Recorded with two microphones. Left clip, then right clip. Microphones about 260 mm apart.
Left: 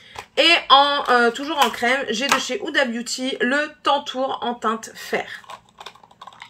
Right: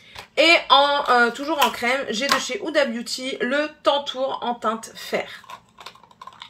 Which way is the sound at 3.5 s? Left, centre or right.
Right.